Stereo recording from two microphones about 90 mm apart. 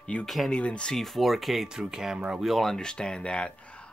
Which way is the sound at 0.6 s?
10° left (ahead or behind).